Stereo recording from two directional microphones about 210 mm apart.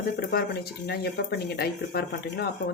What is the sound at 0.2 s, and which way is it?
Speech, 45° left (ahead or behind).